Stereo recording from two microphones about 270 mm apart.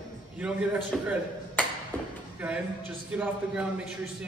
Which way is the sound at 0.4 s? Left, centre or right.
Centre.